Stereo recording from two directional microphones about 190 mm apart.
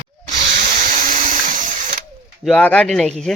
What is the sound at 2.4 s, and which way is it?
Speech, 5° left (ahead or behind).